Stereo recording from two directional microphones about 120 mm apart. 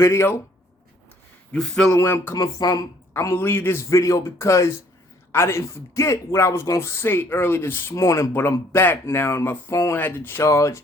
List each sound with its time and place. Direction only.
0.0 s speech: 25° left (ahead or behind)
1.5 s speech: 5° left (ahead or behind)
1.9 s speech: 25° left (ahead or behind)